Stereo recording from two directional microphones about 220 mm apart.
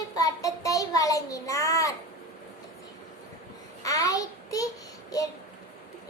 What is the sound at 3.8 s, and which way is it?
Child singing, 15° left (ahead or behind).